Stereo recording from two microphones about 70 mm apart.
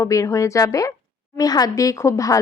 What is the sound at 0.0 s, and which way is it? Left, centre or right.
Speech, left.